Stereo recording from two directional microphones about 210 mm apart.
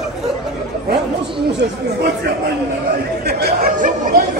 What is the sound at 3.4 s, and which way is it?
Speech, 40° right (ahead or behind).